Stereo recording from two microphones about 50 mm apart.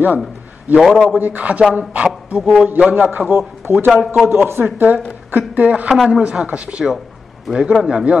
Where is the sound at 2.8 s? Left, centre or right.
Right.